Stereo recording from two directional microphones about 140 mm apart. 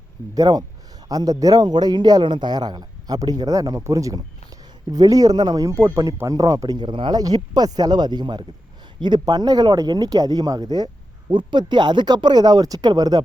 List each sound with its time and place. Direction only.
0.3 s speech: 30° right (ahead or behind)